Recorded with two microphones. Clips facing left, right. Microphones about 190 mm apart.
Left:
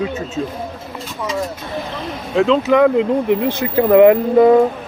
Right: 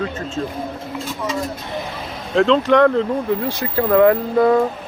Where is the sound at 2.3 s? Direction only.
5° left (ahead or behind).